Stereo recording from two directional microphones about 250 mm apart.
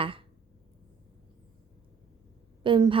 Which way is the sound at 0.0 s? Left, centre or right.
Right.